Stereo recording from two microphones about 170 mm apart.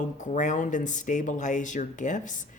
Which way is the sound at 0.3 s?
45° left (ahead or behind).